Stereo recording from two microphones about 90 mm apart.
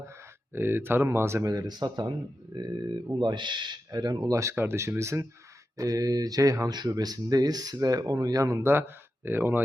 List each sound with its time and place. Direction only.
0.5 s speech: 25° right (ahead or behind); by 2.1 s 50° right (ahead or behind)
3.2 s speech: 55° right (ahead or behind); by 4.5 s 35° right (ahead or behind)
4.5 s speech: 25° right (ahead or behind)
6.7 s speech: 50° right (ahead or behind)
9.2 s speech: 25° right (ahead or behind)